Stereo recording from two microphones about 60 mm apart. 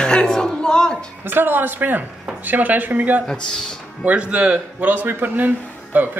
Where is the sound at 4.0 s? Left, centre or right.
Right.